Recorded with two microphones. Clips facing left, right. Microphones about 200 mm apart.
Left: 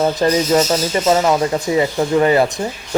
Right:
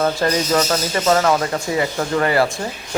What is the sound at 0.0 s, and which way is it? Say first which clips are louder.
Speech: left 3 dB; 20° left (ahead or behind).